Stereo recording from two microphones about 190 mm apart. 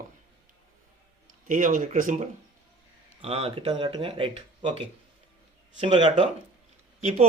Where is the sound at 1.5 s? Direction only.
45° right (ahead or behind).